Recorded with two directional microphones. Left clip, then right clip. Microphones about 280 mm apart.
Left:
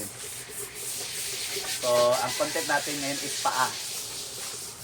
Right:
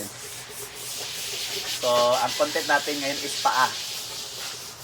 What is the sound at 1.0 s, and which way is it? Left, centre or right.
Snake, centre.